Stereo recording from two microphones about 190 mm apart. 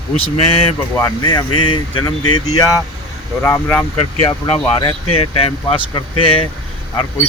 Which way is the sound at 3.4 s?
10° left (ahead or behind).